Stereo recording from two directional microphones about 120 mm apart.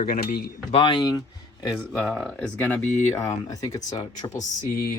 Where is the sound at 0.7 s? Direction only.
45° left (ahead or behind).